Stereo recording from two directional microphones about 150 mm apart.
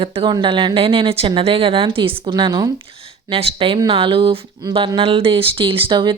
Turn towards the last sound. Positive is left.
turn(degrees=-30)  # may be behind; listen again after turning